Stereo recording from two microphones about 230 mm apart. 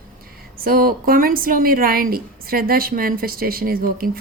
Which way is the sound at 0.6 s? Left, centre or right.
Right.